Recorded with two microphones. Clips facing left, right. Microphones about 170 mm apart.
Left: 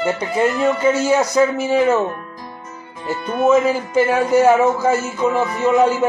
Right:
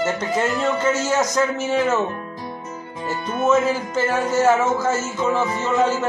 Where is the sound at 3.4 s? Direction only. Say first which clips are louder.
Left 4 dB; 10° left (ahead or behind).